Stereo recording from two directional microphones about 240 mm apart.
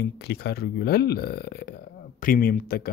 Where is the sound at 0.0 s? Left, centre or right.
Left.